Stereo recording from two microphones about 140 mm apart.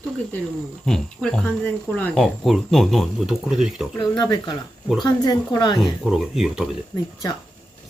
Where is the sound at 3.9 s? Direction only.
30° left (ahead or behind).